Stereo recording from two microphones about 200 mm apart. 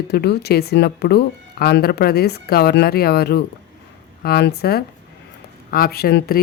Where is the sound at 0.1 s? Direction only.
55° left (ahead or behind).